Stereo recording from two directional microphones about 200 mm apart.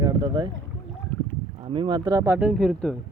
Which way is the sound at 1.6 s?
30° right (ahead or behind).